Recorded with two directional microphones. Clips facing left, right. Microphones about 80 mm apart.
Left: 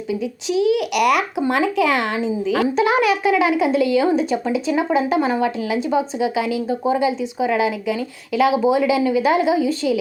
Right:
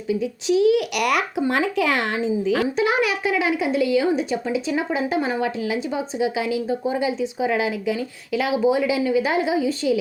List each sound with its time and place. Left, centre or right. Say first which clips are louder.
0.1 s speech: right 2 dB; right
2.7 s a woman's voice: left 4 dB; centre